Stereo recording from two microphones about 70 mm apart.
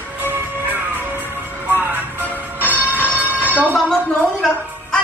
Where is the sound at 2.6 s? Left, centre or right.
Right.